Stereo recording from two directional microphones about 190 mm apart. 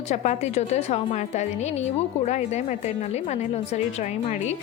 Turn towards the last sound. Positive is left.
turn(degrees=35)  # may be behind; listen again after turning